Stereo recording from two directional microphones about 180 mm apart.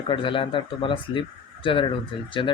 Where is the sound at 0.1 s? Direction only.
30° left (ahead or behind).